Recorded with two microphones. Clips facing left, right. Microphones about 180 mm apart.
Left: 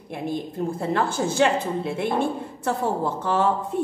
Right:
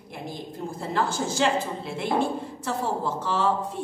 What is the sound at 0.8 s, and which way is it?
A woman's voice, 60° left (ahead or behind).